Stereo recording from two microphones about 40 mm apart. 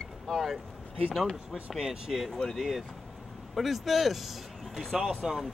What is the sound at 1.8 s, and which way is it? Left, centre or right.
Speech, centre.